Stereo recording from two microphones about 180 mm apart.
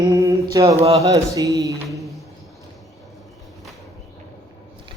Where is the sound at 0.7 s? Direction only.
35° right (ahead or behind).